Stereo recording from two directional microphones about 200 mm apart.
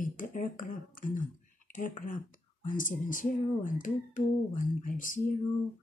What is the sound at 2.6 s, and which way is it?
Crowing, 40° left (ahead or behind).